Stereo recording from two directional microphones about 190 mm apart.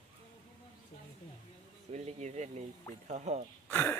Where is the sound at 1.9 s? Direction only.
40° right (ahead or behind).